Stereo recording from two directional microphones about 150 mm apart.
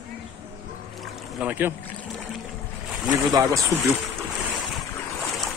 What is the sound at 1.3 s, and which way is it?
Speech, 10° right (ahead or behind).